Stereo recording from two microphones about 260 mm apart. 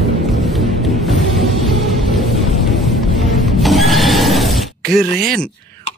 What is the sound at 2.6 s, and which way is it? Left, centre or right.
Music, centre.